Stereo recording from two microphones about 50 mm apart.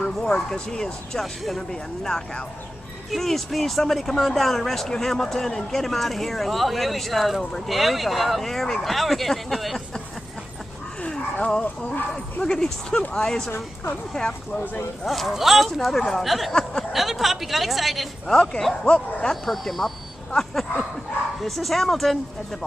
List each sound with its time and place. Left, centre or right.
0.0 s speech: centre
11.0 s dog: left
11.6 s speech: left
12.1 s speech: centre
15.0 s speech: centre
18.2 s speech: centre
19.4 s speech: centre
20.2 s a sound: centre
21.4 s speech: centre